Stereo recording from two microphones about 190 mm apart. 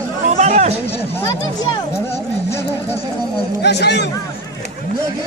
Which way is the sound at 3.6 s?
60° left (ahead or behind).